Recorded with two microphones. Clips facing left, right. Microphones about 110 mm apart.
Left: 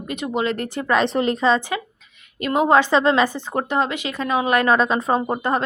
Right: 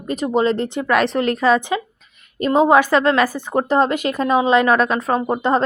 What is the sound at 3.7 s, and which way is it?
Speech, 40° right (ahead or behind).